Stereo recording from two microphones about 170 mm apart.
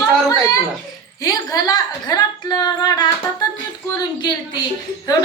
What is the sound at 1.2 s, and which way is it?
Speech, 20° left (ahead or behind).